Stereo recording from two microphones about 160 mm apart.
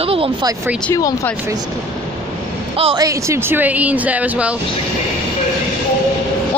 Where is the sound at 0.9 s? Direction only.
20° left (ahead or behind).